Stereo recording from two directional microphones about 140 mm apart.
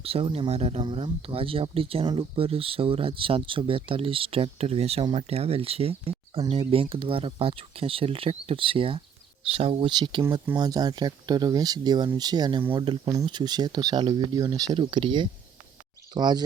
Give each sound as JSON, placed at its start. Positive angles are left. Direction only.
{"t": 0.0, "sound": "speech", "side_deg": -40}
{"t": 0.8, "sound": "speech", "side_deg": -35}